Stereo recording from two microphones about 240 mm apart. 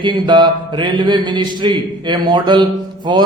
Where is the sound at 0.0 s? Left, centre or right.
Centre.